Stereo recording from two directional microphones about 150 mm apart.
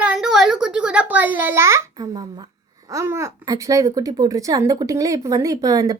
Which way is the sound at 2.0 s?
30° right (ahead or behind).